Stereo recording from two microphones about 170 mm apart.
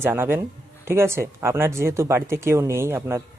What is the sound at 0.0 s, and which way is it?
Speech, 15° right (ahead or behind).